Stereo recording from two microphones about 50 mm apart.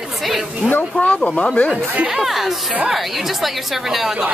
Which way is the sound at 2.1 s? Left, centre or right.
Centre.